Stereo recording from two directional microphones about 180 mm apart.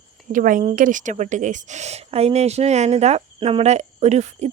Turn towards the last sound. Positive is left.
turn(degrees=-40)  # may be behind; listen again after turning